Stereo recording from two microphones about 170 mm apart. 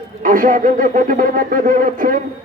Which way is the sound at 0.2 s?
50° right (ahead or behind).